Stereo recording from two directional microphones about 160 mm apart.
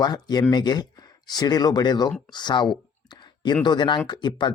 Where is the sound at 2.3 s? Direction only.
25° left (ahead or behind).